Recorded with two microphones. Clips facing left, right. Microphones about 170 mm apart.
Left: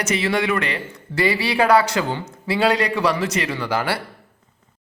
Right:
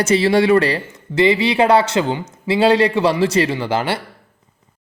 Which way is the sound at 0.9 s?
20° right (ahead or behind).